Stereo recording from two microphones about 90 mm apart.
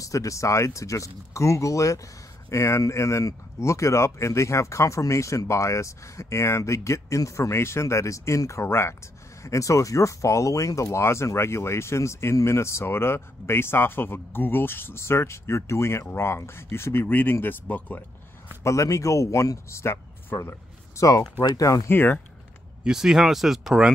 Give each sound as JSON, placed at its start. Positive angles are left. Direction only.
{"t": 0.0, "sound": "speech", "side_deg": 35}
{"t": 18.6, "sound": "speech", "side_deg": 35}
{"t": 21.8, "sound": "speech", "side_deg": 25}
{"t": 22.8, "sound": "speech", "side_deg": -5}